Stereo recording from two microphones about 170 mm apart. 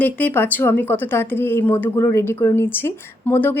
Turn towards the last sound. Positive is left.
turn(degrees=10)  # may be behind; listen again after turning